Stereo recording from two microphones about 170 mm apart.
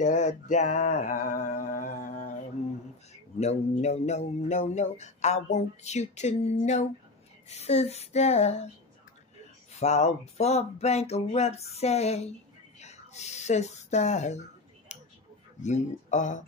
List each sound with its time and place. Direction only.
0.0 s mantra: 45° left (ahead or behind)
0.9 s a sound: 50° left (ahead or behind)
3.1 s speech: 40° left (ahead or behind)
9.8 s speech: 40° left (ahead or behind)
14.9 s a sound: 45° left (ahead or behind)
15.6 s mantra: 45° left (ahead or behind)